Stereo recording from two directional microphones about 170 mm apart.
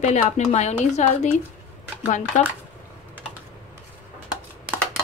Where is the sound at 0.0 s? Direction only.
45° left (ahead or behind).